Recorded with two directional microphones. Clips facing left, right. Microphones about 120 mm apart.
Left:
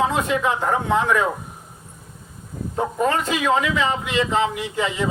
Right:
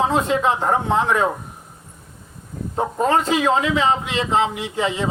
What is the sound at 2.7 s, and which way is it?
Speech, 30° right (ahead or behind).